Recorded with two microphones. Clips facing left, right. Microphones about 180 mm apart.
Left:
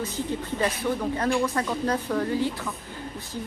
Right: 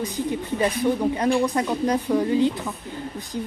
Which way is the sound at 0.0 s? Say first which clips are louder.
Right 3 dB; 15° right (ahead or behind).